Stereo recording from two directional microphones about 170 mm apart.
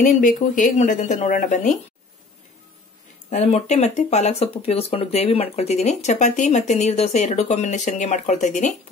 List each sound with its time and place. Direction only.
0.0 s speech: 50° left (ahead or behind)
3.3 s speech: 40° left (ahead or behind)